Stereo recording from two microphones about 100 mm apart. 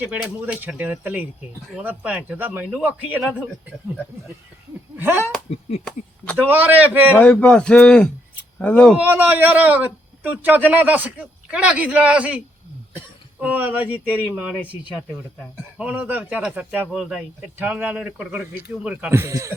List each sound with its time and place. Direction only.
0.1 s a man's voice: 15° right (ahead or behind)
4.9 s speech: 20° right (ahead or behind)
6.5 s a man's voice: 15° right (ahead or behind)
7.2 s speech: 10° left (ahead or behind)
9.0 s a man's voice: 20° right (ahead or behind)
13.4 s a man's voice: 15° right (ahead or behind)
15.8 s a man's voice: 15° right (ahead or behind)
17.0 s a man's voice: 5° right (ahead or behind)
19.1 s a man's voice: 30° right (ahead or behind)